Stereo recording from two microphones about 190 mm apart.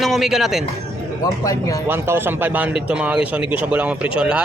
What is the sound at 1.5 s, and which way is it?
Speech, 20° left (ahead or behind).